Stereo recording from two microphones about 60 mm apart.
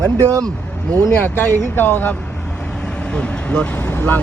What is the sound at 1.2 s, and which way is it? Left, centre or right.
Speech, left.